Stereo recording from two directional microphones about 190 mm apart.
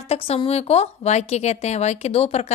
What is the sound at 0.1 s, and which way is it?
A woman's voice, 30° left (ahead or behind).